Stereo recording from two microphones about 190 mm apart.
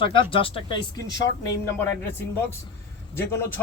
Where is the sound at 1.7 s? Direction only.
10° left (ahead or behind).